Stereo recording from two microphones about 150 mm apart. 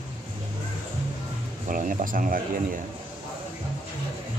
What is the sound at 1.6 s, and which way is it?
Speech, 65° right (ahead or behind).